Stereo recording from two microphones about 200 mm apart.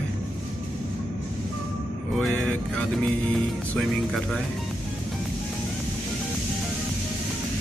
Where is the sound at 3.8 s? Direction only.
Centre (ahead or behind).